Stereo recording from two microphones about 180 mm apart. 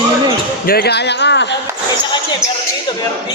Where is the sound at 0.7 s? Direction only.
60° left (ahead or behind).